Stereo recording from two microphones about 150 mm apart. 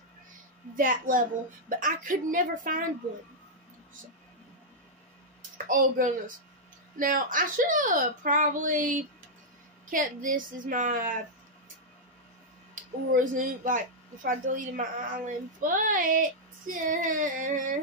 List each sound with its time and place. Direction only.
0.7 s a woman's voice: 65° right (ahead or behind)
5.7 s a woman's voice: 65° right (ahead or behind)
13.1 s a woman's voice: 60° right (ahead or behind)